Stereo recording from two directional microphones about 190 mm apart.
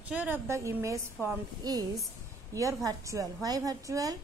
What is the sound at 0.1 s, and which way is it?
A woman's voice, 10° right (ahead or behind).